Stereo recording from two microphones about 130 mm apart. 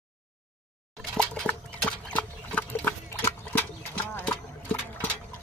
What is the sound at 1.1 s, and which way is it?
Horse, 5° left (ahead or behind).